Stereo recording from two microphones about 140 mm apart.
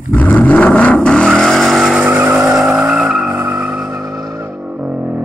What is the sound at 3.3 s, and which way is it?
Vehicle, 25° right (ahead or behind).